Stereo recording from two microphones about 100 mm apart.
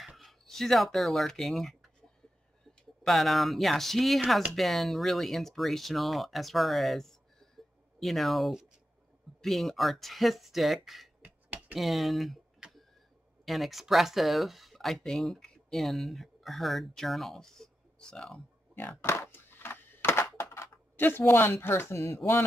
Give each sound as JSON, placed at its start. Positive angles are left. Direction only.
{"t": 0.0, "sound": "speech", "side_deg": 0}
{"t": 3.0, "sound": "speech", "side_deg": 0}
{"t": 11.7, "sound": "tick", "side_deg": 0}
{"t": 13.5, "sound": "speech", "side_deg": 0}
{"t": 18.8, "sound": "a sound", "side_deg": 20}
{"t": 22.1, "sound": "speech", "side_deg": 25}